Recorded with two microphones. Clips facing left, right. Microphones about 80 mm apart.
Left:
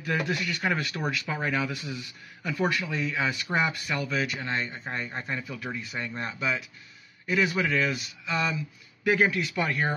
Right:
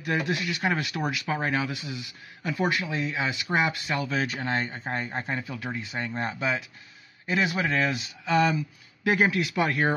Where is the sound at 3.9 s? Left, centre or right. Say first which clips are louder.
Right 1 dB; right.